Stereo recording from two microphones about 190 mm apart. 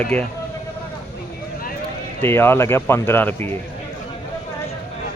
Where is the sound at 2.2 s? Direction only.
10° left (ahead or behind).